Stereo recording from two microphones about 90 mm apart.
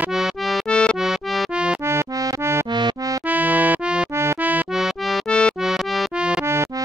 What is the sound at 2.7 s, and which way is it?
Music, 55° right (ahead or behind).